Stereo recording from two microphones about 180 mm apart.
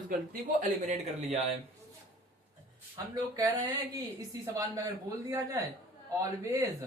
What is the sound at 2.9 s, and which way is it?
A woman's voice, 20° right (ahead or behind).